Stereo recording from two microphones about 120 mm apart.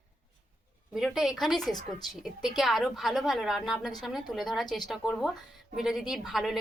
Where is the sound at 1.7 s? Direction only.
35° left (ahead or behind).